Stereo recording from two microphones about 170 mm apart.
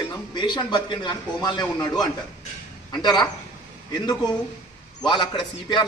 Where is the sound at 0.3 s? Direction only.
25° left (ahead or behind).